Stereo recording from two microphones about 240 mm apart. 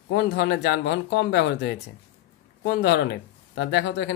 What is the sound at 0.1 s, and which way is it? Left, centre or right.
Speech, left.